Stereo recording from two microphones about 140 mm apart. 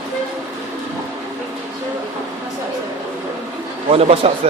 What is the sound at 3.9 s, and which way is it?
Speech, 45° right (ahead or behind).